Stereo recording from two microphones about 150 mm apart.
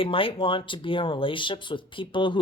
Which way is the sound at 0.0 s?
35° left (ahead or behind).